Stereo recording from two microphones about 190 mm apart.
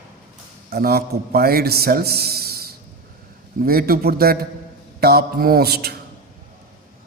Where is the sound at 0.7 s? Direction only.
55° right (ahead or behind).